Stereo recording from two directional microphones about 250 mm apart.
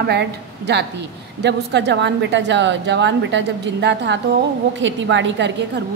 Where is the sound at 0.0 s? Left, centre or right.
Right.